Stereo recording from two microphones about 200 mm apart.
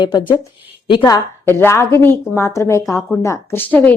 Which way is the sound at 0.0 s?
20° left (ahead or behind).